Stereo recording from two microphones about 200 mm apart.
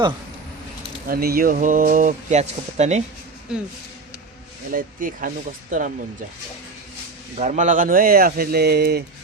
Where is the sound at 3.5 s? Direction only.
5° right (ahead or behind).